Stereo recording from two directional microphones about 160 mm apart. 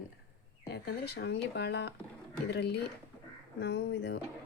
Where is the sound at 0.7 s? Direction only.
90° left.